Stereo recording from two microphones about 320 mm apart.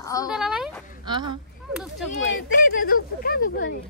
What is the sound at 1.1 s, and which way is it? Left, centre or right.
Speech, centre.